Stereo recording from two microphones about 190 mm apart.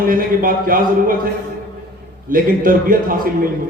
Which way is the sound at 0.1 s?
45° right (ahead or behind).